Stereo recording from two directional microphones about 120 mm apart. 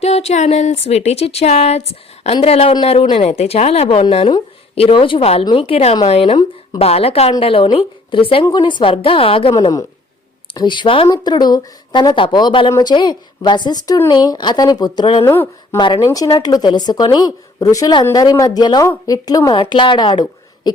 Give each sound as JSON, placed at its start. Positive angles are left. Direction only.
{"t": 0.0, "sound": "a woman's voice", "side_deg": 65}
{"t": 9.6, "sound": "a woman's voice", "side_deg": 35}
{"t": 11.1, "sound": "a woman's voice", "side_deg": 35}
{"t": 15.2, "sound": "a woman's voice", "side_deg": 20}